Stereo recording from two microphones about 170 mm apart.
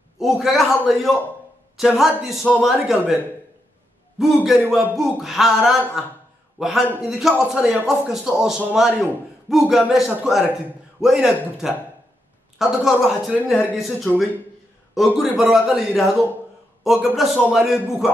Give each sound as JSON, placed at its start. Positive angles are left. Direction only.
{"t": 0.2, "sound": "a man's voice", "side_deg": 0}
{"t": 4.2, "sound": "a man's voice", "side_deg": 0}